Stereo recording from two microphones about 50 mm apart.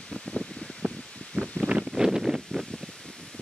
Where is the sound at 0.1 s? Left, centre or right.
Left.